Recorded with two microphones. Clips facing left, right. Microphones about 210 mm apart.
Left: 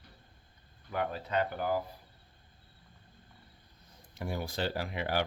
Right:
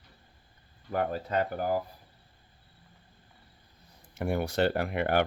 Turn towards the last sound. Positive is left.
turn(degrees=-60)  # may be behind; listen again after turning